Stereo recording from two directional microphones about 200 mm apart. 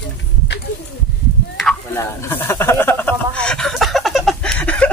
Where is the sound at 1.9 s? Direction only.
10° left (ahead or behind).